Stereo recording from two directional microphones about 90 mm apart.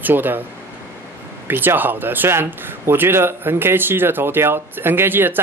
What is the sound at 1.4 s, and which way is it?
Speech, 20° right (ahead or behind).